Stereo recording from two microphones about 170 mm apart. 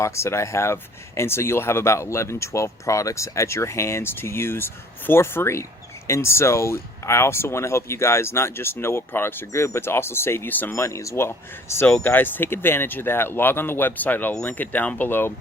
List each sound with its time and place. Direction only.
0.0 s speech: 15° left (ahead or behind)